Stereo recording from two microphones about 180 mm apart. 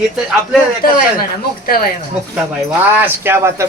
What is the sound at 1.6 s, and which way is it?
Speech, 55° left (ahead or behind).